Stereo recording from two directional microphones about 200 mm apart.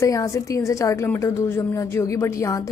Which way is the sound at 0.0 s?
15° left (ahead or behind).